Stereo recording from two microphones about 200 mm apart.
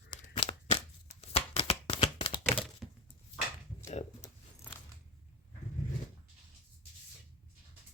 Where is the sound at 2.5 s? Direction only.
Centre (ahead or behind).